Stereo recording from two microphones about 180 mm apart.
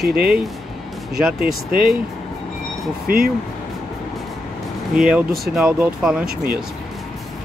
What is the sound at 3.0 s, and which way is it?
Speech, 55° right (ahead or behind).